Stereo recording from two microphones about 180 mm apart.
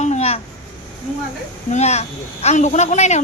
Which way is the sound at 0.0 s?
40° left (ahead or behind).